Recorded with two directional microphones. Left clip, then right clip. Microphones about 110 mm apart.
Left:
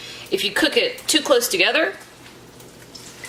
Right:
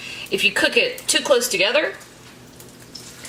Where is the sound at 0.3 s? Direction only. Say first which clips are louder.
Right 2 dB; 20° left (ahead or behind).